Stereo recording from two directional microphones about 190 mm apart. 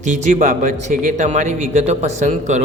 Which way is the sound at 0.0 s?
40° right (ahead or behind).